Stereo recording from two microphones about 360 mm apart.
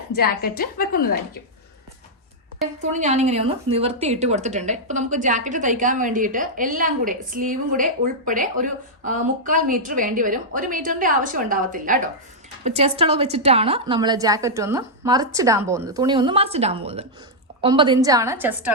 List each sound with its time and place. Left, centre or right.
0.1 s a woman's voice: left
3.0 s a woman's voice: centre